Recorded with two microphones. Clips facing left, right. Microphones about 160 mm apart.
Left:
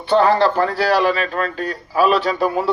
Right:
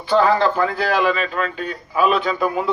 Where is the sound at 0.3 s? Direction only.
30° left (ahead or behind).